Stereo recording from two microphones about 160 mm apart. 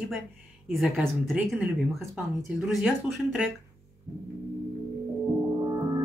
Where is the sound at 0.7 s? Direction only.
5° right (ahead or behind).